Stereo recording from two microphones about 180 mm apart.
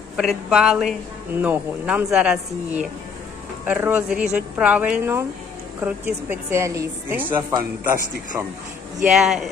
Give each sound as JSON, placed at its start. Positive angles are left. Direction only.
{"t": 0.2, "sound": "a woman's voice", "side_deg": 0}
{"t": 7.8, "sound": "a man's voice", "side_deg": -50}
{"t": 9.0, "sound": "speech", "side_deg": 0}